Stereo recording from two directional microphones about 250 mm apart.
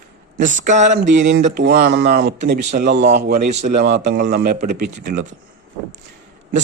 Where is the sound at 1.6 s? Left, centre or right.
Right.